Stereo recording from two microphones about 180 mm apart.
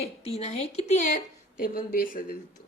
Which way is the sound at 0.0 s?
35° left (ahead or behind).